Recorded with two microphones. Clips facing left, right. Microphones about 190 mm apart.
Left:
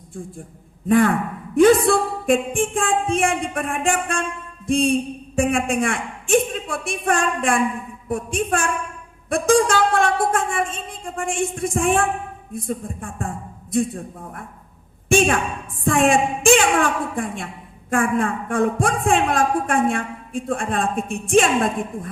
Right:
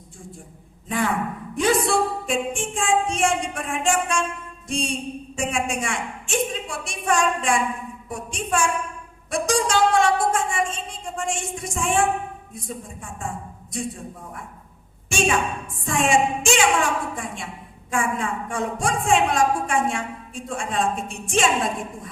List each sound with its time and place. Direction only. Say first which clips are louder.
0.9 s speech: left 8 dB; 55° left (ahead or behind)
15.8 s speech: left 3 dB; 55° left (ahead or behind)